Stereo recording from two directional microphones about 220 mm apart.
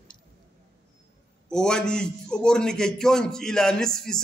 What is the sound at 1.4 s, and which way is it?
A man's voice, 5° left (ahead or behind).